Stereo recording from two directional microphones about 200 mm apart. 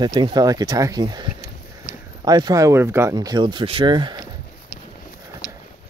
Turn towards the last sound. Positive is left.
turn(degrees=-20)  # may be behind; listen again after turning